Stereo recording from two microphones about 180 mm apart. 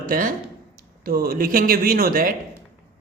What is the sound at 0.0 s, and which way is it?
Speech, 50° right (ahead or behind).